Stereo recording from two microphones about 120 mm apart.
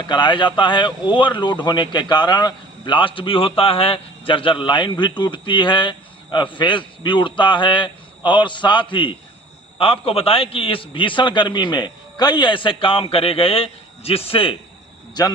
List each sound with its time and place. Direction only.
0.0 s a man's voice: 40° left (ahead or behind)